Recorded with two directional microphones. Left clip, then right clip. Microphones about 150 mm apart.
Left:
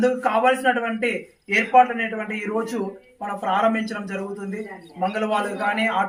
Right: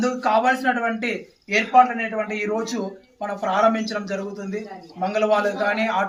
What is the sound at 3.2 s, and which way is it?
A man's voice, 10° right (ahead or behind).